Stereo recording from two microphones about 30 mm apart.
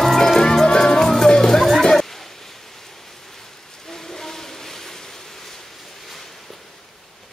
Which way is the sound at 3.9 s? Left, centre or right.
Centre.